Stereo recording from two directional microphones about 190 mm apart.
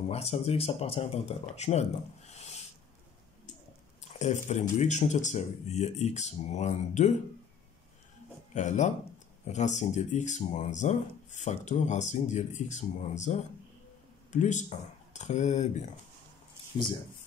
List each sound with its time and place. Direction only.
0.1 s speech: 30° left (ahead or behind)
4.2 s speech: 35° left (ahead or behind)
8.5 s speech: 40° left (ahead or behind)